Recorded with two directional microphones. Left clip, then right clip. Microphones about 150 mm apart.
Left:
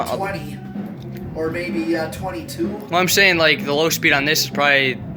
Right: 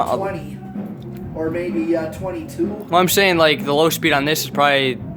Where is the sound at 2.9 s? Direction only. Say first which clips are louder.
Even; 25° right (ahead or behind).